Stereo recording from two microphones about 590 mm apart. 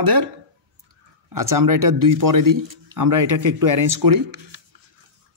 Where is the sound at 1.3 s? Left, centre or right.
Right.